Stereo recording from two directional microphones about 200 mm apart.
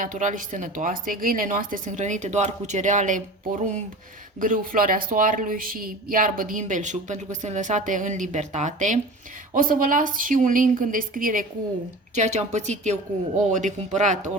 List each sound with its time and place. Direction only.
0.0 s a woman's voice: 40° right (ahead or behind)
4.4 s a woman's voice: 45° right (ahead or behind)